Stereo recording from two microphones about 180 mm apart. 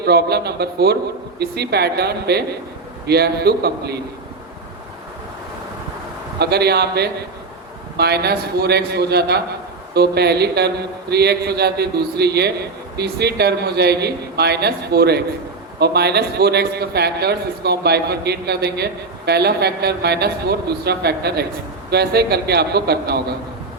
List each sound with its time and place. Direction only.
0.0 s a man's voice: 65° right (ahead or behind)
6.4 s a man's voice: 65° right (ahead or behind)